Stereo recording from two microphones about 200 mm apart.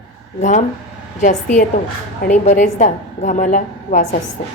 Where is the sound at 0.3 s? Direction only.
35° left (ahead or behind).